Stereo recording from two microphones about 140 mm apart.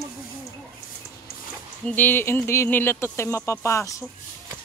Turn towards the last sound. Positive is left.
turn(degrees=20)  # may be behind; listen again after turning